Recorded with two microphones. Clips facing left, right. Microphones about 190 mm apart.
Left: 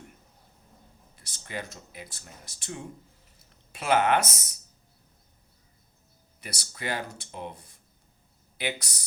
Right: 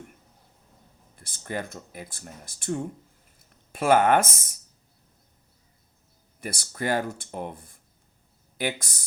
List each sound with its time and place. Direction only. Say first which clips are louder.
1.1 s speech: right 5 dB; 50° right (ahead or behind)
6.4 s speech: right 6 dB; 50° right (ahead or behind)